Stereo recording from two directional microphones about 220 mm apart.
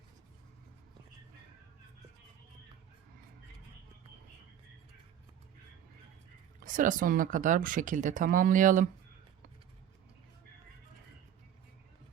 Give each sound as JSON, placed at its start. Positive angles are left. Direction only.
{"t": 6.6, "sound": "speech", "side_deg": -35}